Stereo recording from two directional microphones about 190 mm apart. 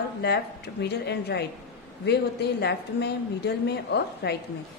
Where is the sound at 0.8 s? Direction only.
60° left (ahead or behind).